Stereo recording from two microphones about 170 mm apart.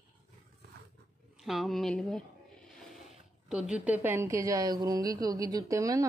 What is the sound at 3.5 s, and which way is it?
A woman's voice, 5° right (ahead or behind).